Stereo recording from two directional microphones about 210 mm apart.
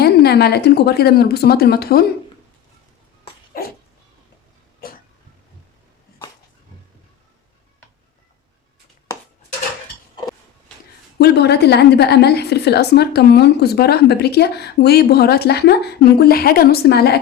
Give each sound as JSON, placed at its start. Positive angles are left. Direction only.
{"t": 0.0, "sound": "a woman's voice", "side_deg": 50}
{"t": 3.5, "sound": "dog", "side_deg": 45}
{"t": 11.2, "sound": "a woman's voice", "side_deg": 50}